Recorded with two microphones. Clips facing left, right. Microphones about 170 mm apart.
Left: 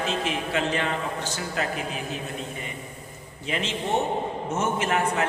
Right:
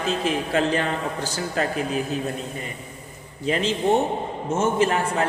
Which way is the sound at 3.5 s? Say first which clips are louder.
Right 7 dB; 35° right (ahead or behind).